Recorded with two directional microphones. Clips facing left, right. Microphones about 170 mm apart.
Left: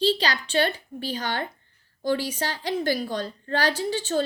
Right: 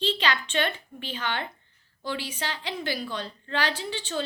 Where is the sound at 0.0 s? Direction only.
35° left (ahead or behind).